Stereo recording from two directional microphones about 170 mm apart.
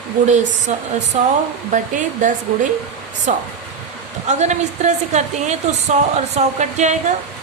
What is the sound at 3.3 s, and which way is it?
Speech, 45° right (ahead or behind).